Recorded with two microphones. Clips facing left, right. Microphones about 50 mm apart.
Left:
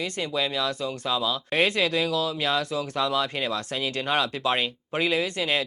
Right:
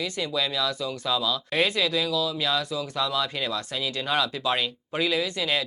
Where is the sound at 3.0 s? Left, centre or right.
Left.